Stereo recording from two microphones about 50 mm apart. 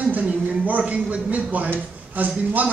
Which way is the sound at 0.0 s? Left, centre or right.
Right.